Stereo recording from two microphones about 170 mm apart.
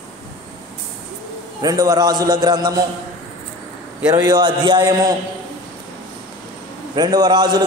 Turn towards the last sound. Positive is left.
turn(degrees=-25)  # may be behind; listen again after turning